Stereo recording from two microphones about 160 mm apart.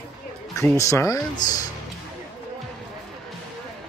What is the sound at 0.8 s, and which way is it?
Speech, 20° left (ahead or behind).